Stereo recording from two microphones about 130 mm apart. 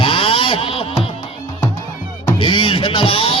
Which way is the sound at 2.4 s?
40° left (ahead or behind).